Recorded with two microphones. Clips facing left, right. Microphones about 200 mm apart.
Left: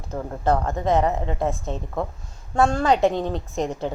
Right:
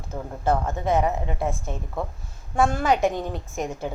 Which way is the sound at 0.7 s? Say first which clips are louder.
Left 2 dB; 20° left (ahead or behind).